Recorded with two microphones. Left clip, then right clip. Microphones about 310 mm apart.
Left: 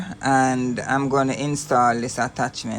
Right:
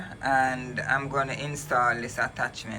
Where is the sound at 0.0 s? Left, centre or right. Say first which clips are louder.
Left 5 dB; left.